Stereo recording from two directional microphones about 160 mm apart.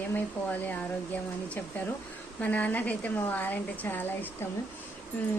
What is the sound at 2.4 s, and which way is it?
A woman's voice, 10° left (ahead or behind).